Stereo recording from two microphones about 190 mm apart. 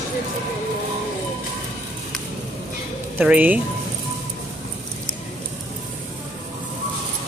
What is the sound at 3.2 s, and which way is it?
Speech, 10° right (ahead or behind).